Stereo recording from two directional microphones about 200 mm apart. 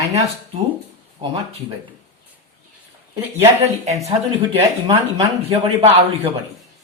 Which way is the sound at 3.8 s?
35° right (ahead or behind).